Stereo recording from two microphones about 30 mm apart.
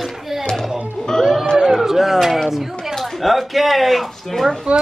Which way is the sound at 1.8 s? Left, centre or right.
Centre.